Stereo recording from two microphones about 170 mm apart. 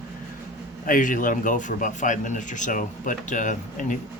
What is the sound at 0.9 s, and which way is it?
A man's voice, 50° left (ahead or behind).